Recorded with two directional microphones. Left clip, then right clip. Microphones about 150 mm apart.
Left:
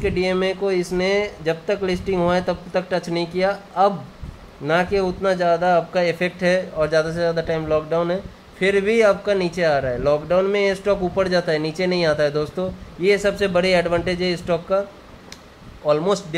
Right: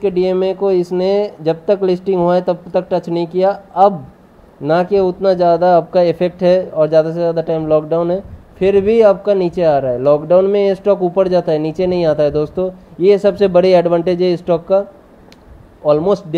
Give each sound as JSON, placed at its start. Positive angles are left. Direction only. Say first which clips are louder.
{"t": 0.0, "sound": "speech", "louder": "right 6 dB", "side_deg": -30}
{"t": 16.1, "sound": "speech", "louder": "right 6 dB", "side_deg": -30}